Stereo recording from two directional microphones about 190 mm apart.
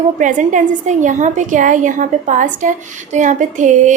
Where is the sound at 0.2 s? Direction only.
40° right (ahead or behind).